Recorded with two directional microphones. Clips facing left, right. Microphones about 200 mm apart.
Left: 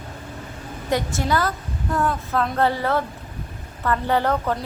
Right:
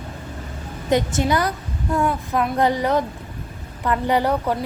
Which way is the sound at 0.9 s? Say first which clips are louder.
Right 3 dB; 20° right (ahead or behind).